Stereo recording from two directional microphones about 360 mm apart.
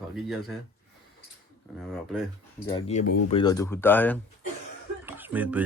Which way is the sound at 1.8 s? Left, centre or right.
Centre.